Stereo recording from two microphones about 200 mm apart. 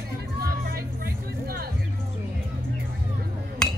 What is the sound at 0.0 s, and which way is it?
Music, 50° right (ahead or behind).